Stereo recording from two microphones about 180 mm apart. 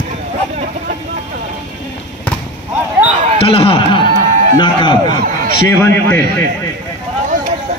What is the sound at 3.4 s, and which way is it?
Speech, 30° left (ahead or behind).